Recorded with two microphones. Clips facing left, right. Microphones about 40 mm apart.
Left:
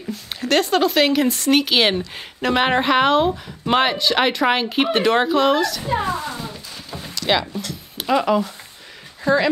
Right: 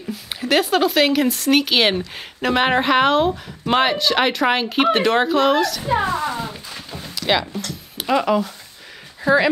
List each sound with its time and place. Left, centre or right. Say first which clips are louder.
0.1 s speech: even; centre
5.9 s speech: right 2 dB; right
6.2 s cat: right 4 dB; centre
6.9 s clip-clop: even; centre
8.0 s speech: even; centre
9.2 s speech: right 2 dB; centre